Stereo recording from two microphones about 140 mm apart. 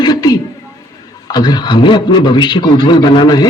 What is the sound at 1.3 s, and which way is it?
A man's voice, 30° left (ahead or behind).